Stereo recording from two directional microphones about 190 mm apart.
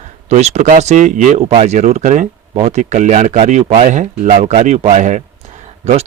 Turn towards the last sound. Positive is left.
turn(degrees=-35)  # may be behind; listen again after turning